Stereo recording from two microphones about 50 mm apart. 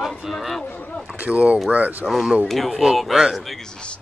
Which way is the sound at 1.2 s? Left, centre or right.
Right.